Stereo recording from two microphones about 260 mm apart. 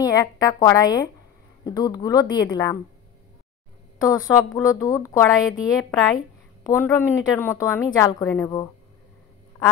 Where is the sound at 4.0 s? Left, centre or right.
Centre.